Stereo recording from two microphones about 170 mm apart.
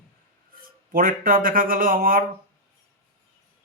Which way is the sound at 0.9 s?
55° right (ahead or behind).